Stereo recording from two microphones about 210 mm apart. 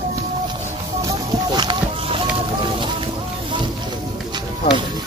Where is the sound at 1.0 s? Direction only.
20° right (ahead or behind).